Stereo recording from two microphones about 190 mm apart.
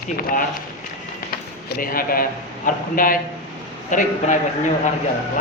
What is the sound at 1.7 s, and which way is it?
A woman's voice, 50° left (ahead or behind).